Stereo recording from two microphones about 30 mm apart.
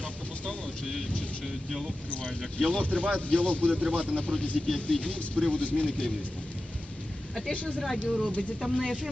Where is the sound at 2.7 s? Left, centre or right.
Left.